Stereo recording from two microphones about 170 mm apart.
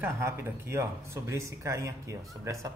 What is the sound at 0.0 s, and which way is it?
Speech, 15° right (ahead or behind).